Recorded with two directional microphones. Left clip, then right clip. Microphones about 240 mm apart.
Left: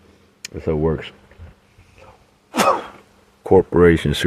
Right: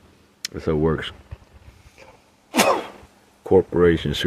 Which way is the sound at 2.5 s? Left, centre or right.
Centre.